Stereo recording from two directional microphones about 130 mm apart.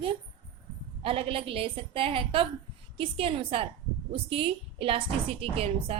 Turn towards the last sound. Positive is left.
turn(degrees=-50)  # may be behind; listen again after turning